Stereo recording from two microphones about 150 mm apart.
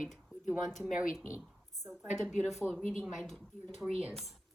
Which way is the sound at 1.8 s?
50° left (ahead or behind).